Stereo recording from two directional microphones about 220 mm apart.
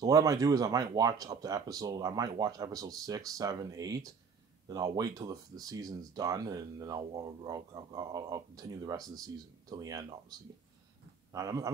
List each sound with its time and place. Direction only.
0.0 s speech: 15° right (ahead or behind)
11.3 s speech: 15° right (ahead or behind)